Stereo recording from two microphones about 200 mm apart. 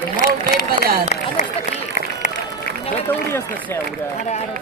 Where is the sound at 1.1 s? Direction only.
35° left (ahead or behind).